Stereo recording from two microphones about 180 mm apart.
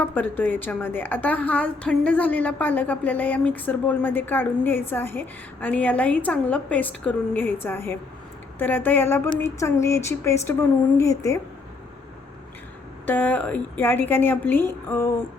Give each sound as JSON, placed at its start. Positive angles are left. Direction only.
{"t": 0.0, "sound": "a woman's voice", "side_deg": 10}
{"t": 13.1, "sound": "a woman's voice", "side_deg": 10}